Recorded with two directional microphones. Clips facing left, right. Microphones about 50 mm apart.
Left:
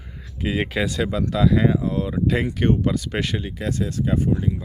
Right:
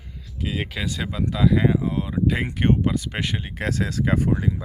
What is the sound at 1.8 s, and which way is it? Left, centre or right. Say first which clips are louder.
Speech: left 2 dB; right.